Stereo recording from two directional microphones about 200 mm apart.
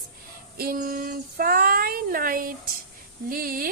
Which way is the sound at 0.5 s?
45° right (ahead or behind).